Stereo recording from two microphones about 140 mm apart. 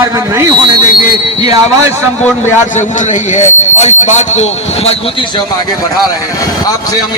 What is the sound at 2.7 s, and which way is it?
A man's voice, 55° left (ahead or behind).